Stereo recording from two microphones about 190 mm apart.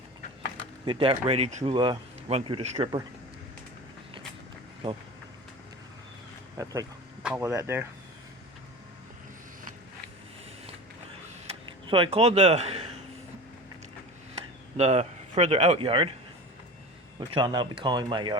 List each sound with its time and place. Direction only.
0.9 s speech: 30° right (ahead or behind)
1.7 s speech: 25° right (ahead or behind)
7.2 s speech: 5° right (ahead or behind)
11.4 s speech: 30° right (ahead or behind)
14.8 s speech: 35° right (ahead or behind)
17.2 s speech: 20° right (ahead or behind)